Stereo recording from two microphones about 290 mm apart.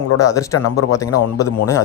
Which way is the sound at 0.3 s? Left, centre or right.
Centre.